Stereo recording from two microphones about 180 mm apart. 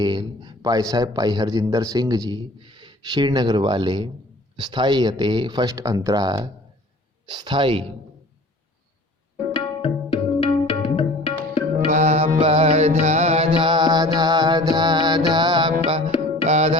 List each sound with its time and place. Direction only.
0.0 s a man's voice: 25° right (ahead or behind)
9.8 s music: 35° left (ahead or behind)
11.9 s music: 40° right (ahead or behind); by 15.7 s 25° right (ahead or behind)
16.5 s music: 35° right (ahead or behind)